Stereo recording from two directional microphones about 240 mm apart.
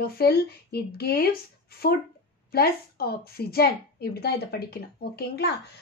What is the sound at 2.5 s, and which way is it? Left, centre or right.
Speech, left.